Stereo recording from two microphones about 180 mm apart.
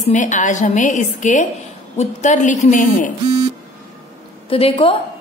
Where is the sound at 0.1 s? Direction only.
45° left (ahead or behind).